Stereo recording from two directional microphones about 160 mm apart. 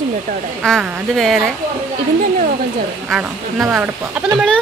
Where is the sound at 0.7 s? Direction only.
Centre (ahead or behind).